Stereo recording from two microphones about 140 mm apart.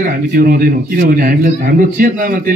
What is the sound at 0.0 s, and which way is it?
Speech, 90° right.